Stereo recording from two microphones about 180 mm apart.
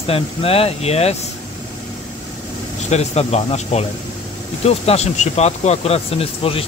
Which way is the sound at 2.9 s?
35° left (ahead or behind).